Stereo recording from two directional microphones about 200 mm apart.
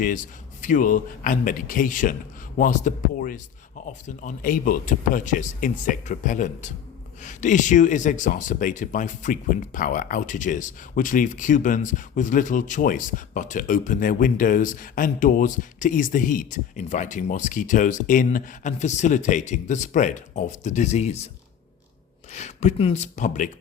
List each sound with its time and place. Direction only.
0.6 s speech: 40° left (ahead or behind)
22.3 s speech: 35° left (ahead or behind)